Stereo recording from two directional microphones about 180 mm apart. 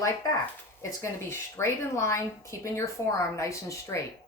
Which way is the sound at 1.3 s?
15° left (ahead or behind).